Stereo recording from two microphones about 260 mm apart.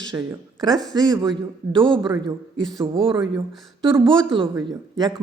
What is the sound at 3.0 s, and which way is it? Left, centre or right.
Speech, centre.